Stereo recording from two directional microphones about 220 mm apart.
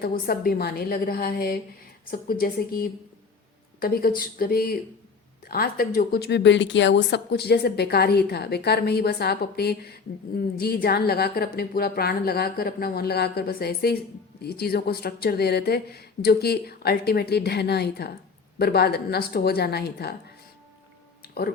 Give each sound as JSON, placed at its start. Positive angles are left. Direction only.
{"t": 0.0, "sound": "a woman's voice", "side_deg": 45}
{"t": 21.2, "sound": "music", "side_deg": 45}